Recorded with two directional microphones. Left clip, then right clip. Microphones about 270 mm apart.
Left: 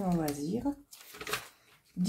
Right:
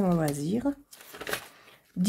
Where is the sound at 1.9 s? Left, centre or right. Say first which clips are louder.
Right 5 dB; right.